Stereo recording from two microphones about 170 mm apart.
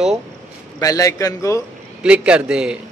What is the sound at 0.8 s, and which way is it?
Speech, 20° left (ahead or behind).